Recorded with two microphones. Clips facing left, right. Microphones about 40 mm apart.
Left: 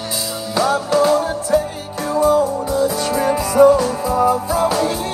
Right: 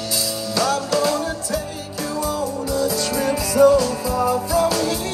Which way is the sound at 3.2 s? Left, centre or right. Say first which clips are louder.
Left 3 dB; left.